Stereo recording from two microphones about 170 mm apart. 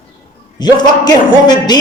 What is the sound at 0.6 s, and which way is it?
A man's voice, 25° left (ahead or behind).